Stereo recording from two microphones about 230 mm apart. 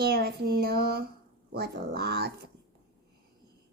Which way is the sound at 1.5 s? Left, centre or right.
Right.